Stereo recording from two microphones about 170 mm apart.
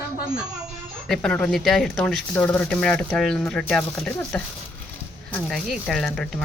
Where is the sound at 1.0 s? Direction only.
5° left (ahead or behind).